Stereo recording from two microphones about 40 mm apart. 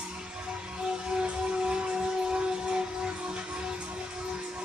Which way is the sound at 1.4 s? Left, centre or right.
Right.